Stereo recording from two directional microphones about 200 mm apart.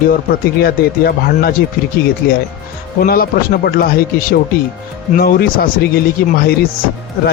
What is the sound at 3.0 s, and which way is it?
A man's voice, 50° left (ahead or behind).